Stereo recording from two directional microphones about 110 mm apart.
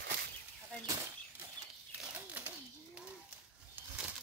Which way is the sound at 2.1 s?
15° right (ahead or behind).